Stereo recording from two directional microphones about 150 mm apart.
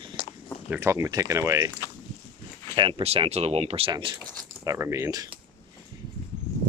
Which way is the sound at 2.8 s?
35° right (ahead or behind).